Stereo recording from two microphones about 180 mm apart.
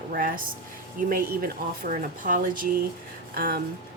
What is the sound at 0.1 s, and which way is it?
A woman's voice, 50° right (ahead or behind).